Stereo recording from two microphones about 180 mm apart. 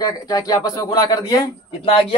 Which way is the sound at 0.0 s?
20° left (ahead or behind).